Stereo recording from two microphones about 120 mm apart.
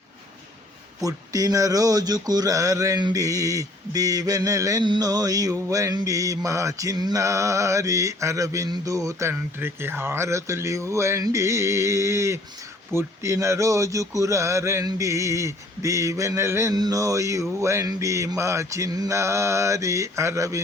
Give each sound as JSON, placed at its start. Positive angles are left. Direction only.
{"t": 1.0, "sound": "mantra", "side_deg": -30}